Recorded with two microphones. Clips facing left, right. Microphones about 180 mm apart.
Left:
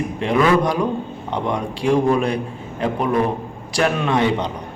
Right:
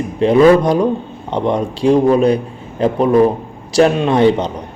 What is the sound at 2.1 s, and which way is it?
A woman's voice, 40° right (ahead or behind).